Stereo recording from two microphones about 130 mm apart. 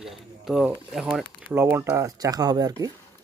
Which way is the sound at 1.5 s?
20° right (ahead or behind).